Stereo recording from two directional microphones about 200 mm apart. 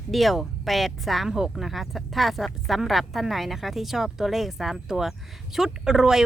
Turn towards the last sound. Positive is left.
turn(degrees=0)  # may be behind; listen again after turning